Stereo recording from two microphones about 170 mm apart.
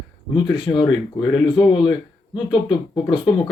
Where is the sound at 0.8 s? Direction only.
25° left (ahead or behind).